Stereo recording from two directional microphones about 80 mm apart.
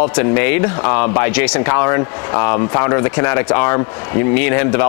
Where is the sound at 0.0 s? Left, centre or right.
Centre.